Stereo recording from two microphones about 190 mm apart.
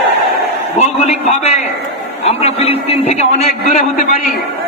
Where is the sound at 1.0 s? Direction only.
35° left (ahead or behind).